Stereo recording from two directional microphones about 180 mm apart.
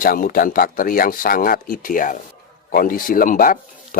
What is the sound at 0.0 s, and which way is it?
Speech, 55° left (ahead or behind).